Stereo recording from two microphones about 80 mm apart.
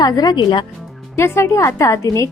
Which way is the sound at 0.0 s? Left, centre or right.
Left.